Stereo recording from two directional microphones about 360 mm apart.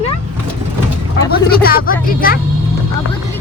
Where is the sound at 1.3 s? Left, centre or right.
Left.